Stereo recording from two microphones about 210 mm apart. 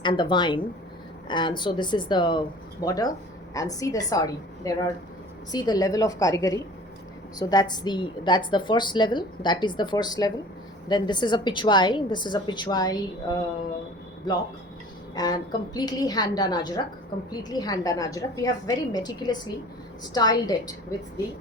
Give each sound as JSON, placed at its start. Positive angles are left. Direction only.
{"t": 0.0, "sound": "a woman's voice", "side_deg": 20}
{"t": 15.1, "sound": "a woman's voice", "side_deg": 20}